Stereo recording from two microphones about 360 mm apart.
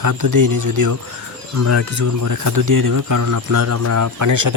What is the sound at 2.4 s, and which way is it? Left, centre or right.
Speech, right.